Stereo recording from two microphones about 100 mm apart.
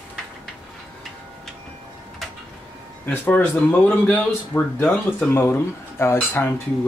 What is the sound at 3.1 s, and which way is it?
Speech, 20° left (ahead or behind).